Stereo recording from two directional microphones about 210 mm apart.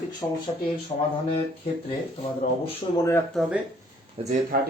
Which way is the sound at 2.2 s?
25° left (ahead or behind).